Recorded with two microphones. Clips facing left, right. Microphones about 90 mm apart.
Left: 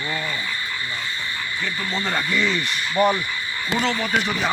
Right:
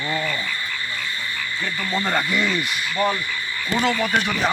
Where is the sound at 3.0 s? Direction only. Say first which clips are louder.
Left 3 dB; 15° left (ahead or behind).